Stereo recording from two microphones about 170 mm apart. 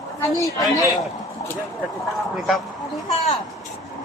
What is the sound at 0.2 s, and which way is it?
Speech, 20° left (ahead or behind).